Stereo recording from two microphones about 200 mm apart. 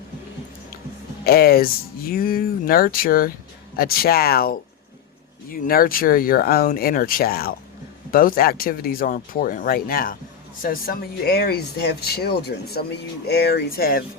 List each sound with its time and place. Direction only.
1.2 s speech: 50° left (ahead or behind)